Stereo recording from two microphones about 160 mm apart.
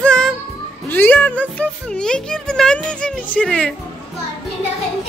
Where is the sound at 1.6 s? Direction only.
5° left (ahead or behind).